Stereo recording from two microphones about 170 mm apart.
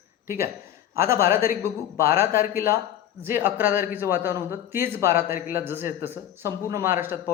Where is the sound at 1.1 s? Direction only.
15° right (ahead or behind).